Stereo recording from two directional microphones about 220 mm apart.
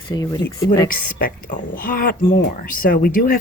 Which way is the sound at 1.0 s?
40° left (ahead or behind).